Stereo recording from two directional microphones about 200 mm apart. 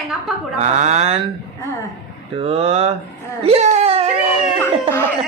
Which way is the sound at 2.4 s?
30° right (ahead or behind).